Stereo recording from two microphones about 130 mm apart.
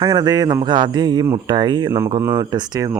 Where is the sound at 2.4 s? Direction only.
30° right (ahead or behind).